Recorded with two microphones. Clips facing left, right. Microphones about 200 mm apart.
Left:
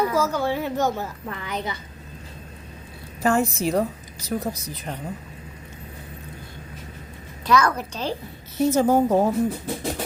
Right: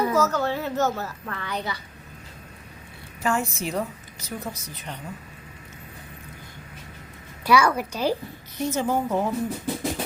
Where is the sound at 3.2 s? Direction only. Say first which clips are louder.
Left 5 dB; 35° left (ahead or behind).